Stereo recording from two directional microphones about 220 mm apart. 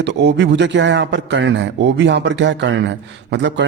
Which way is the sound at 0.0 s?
50° right (ahead or behind).